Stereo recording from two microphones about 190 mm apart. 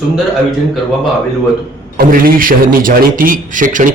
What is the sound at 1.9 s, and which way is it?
A man's voice, 45° right (ahead or behind).